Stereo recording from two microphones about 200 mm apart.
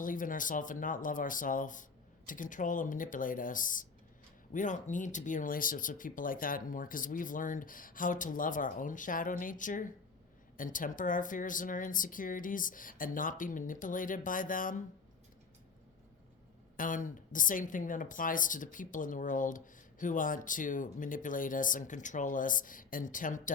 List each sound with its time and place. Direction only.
0.0 s a woman's voice: 40° left (ahead or behind)
16.7 s a woman's voice: 40° left (ahead or behind)